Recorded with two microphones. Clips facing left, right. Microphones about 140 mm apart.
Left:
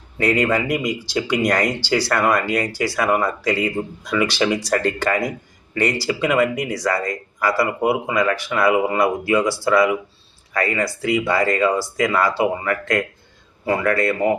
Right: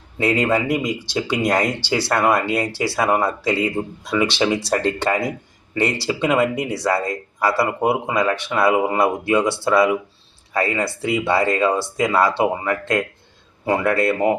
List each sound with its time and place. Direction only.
0.3 s speech: 25° right (ahead or behind)